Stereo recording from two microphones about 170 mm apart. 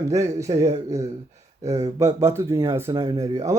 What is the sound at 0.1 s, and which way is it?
Speech, 20° right (ahead or behind).